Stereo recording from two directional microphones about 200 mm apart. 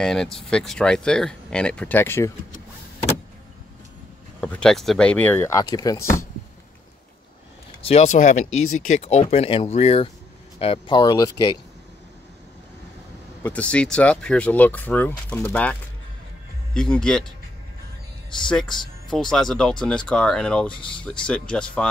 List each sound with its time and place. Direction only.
0.0 s speech: centre (ahead or behind)
4.4 s speech: 5° left (ahead or behind)
7.8 s speech: 30° left (ahead or behind)
13.4 s speech: 5° left (ahead or behind)
18.5 s speech: 5° left (ahead or behind)